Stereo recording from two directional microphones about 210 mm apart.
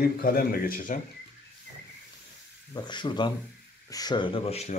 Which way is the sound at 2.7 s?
20° left (ahead or behind).